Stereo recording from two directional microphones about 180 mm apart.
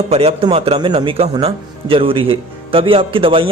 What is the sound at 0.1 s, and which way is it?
A man's voice, 35° right (ahead or behind).